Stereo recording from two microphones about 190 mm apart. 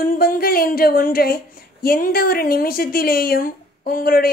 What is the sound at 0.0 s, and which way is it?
A woman's voice, 50° left (ahead or behind).